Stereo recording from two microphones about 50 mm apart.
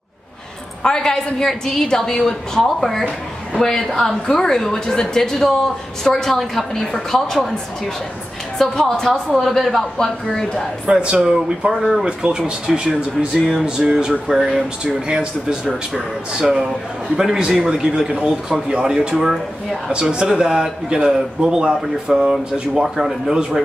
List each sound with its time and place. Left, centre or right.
0.8 s a woman's voice: centre
10.9 s speech: right
11.7 s speech: centre
12.0 s a man's voice: centre
16.3 s a man's voice: centre